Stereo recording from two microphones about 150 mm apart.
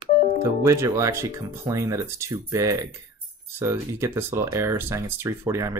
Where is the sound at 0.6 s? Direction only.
20° right (ahead or behind).